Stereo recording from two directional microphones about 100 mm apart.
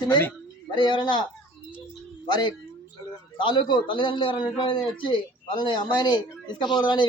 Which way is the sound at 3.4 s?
55° left (ahead or behind).